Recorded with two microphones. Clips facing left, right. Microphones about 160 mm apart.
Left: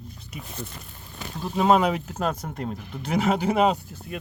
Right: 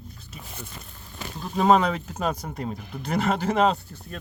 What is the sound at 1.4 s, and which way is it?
Speech, 5° left (ahead or behind).